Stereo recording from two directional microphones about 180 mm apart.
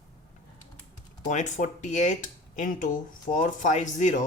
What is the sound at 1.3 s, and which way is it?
Speech, 40° left (ahead or behind).